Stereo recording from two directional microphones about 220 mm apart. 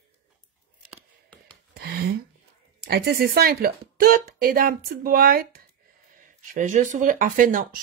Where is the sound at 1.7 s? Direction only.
45° right (ahead or behind).